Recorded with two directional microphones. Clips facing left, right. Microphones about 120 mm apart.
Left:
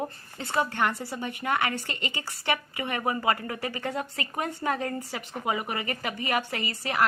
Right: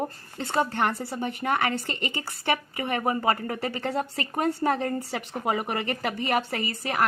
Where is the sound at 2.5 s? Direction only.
35° right (ahead or behind).